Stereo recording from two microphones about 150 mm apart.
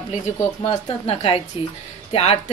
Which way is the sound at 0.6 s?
40° left (ahead or behind).